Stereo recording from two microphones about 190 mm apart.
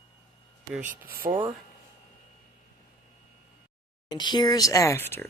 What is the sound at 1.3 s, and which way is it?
Speech, 25° right (ahead or behind).